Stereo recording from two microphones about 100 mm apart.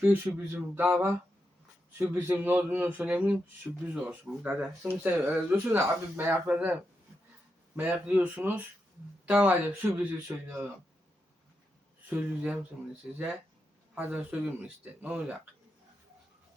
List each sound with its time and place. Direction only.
0.0 s speech: 20° right (ahead or behind)
2.0 s speech: 20° right (ahead or behind)
6.5 s speech: 10° right (ahead or behind)
7.8 s speech: 15° right (ahead or behind)
10.2 s speech: 30° right (ahead or behind)
12.0 s speech: 15° right (ahead or behind)
13.9 s speech: 20° right (ahead or behind)